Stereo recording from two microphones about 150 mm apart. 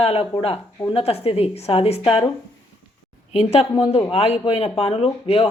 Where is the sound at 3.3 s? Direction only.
45° left (ahead or behind).